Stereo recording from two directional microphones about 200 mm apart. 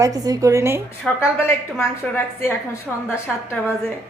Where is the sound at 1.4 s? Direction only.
10° left (ahead or behind).